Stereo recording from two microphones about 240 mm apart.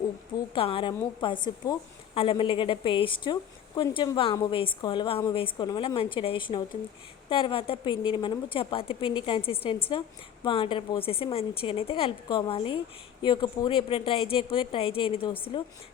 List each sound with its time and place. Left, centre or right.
0.5 s a woman's voice: left